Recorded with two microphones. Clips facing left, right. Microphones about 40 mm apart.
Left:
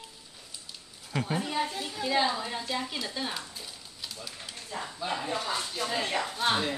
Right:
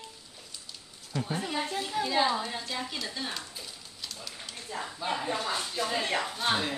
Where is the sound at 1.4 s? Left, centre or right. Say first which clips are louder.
Left 1 dB; centre.